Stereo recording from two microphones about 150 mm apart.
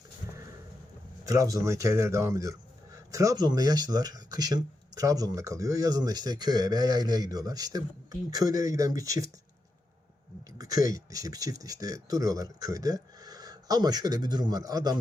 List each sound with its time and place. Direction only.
1.2 s speech: 20° right (ahead or behind)
10.6 s speech: 25° right (ahead or behind)